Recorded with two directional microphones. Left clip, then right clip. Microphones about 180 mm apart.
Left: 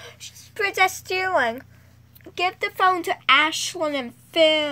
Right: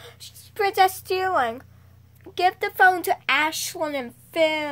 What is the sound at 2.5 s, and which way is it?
A woman's voice, 35° right (ahead or behind).